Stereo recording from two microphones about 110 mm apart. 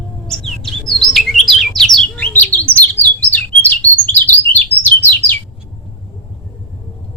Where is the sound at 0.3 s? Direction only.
5° left (ahead or behind).